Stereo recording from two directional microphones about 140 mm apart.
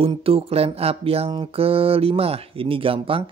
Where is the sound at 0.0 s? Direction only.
40° right (ahead or behind).